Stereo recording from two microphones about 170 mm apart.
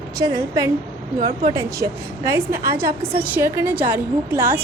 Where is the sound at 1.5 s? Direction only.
20° right (ahead or behind).